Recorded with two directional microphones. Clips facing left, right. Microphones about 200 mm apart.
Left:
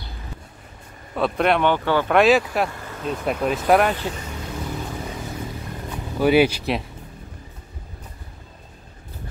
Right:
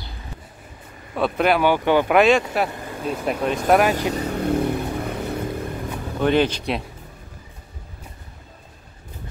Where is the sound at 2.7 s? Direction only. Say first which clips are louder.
Right 2 dB; 15° right (ahead or behind).